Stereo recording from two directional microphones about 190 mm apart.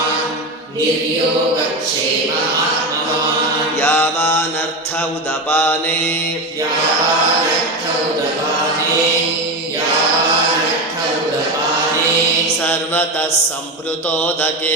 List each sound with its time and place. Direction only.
3.8 s mantra: 10° left (ahead or behind)
5.5 s mantra: 10° left (ahead or behind)
12.6 s mantra: 10° left (ahead or behind)